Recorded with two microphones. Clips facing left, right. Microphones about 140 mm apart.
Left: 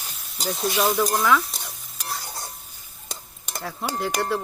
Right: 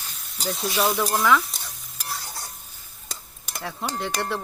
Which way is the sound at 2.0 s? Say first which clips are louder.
Left 2 dB; 10° left (ahead or behind).